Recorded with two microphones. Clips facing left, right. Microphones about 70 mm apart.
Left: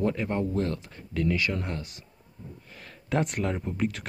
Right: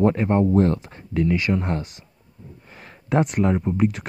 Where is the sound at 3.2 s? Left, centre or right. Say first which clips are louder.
Right 9 dB; centre.